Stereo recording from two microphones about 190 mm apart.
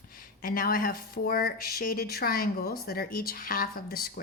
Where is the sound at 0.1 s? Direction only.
45° left (ahead or behind).